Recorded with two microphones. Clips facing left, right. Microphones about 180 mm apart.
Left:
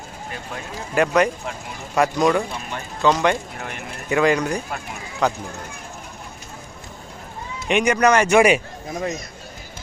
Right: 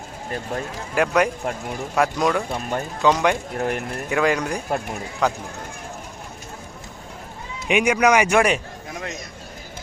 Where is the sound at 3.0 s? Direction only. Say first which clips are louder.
Left 1 dB; 10° right (ahead or behind).